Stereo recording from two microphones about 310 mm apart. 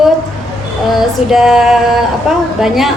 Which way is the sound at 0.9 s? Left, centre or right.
Centre.